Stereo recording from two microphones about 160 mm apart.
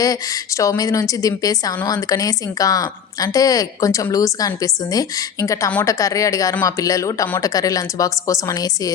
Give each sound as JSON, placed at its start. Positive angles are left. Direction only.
{"t": 0.0, "sound": "a woman's voice", "side_deg": 20}